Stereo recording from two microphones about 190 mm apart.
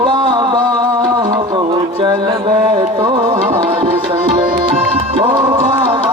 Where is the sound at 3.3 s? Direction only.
40° right (ahead or behind).